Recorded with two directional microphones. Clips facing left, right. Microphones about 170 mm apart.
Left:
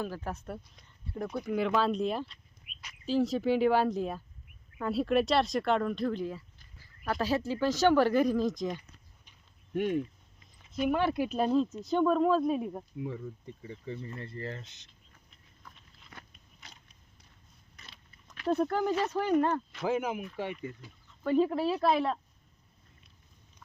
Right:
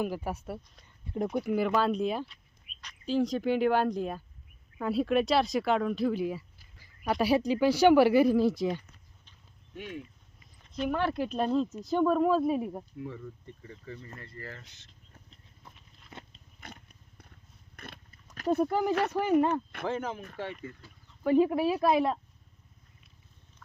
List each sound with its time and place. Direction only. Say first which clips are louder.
0.0 s speech: right 4 dB; 10° right (ahead or behind)
1.0 s speech: right 4 dB; 20° right (ahead or behind)
1.5 s speech: even; centre (ahead or behind)
9.7 s speech: left 11 dB; 50° left (ahead or behind)
10.6 s speech: left 2 dB; 10° left (ahead or behind)
13.0 s speech: left 2 dB; 15° left (ahead or behind)
15.9 s a sound: right 8 dB; 20° right (ahead or behind)
16.6 s vehicle: right 9 dB; 55° right (ahead or behind)
17.7 s a sound: right 10 dB; 55° right (ahead or behind)
18.5 s speech: right 2 dB; 10° right (ahead or behind)
19.9 s speech: left 4 dB; 10° left (ahead or behind)
21.2 s speech: right 3 dB; 10° right (ahead or behind)